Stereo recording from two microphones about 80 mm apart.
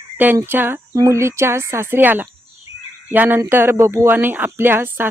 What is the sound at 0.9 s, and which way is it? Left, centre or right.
A woman's voice, right.